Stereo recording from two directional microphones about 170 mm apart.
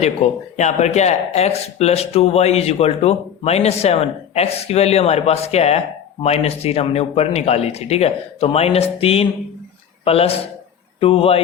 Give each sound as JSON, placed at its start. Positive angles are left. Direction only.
{"t": 0.5, "sound": "speech", "side_deg": 40}